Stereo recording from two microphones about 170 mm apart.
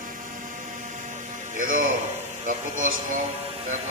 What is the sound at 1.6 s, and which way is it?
A man's voice, 50° right (ahead or behind).